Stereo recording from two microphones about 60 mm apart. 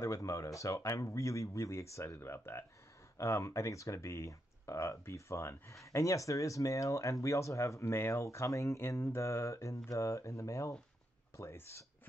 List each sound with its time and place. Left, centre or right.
0.0 s speech: left
11.5 s speech: left